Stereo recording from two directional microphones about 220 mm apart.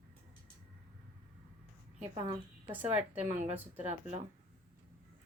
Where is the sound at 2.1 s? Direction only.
20° right (ahead or behind).